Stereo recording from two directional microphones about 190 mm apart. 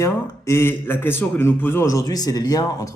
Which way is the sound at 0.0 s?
15° left (ahead or behind).